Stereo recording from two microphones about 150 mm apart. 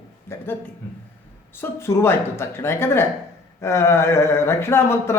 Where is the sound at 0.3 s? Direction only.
15° left (ahead or behind).